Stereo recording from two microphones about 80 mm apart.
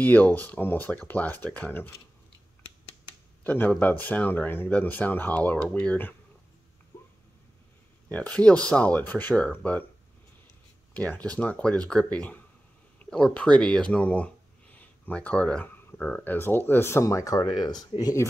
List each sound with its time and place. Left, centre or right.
0.0 s speech: left
3.4 s speech: left
6.9 s a sound: left
8.1 s speech: centre
10.9 s speech: centre
16.3 s speech: left
17.0 s speech: left